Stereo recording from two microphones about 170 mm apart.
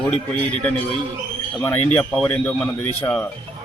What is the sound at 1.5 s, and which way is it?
Speech, 10° left (ahead or behind).